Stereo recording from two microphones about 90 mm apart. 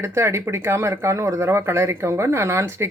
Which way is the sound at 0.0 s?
30° right (ahead or behind).